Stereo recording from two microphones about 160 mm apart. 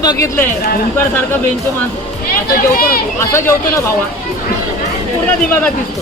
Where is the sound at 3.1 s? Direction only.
15° left (ahead or behind).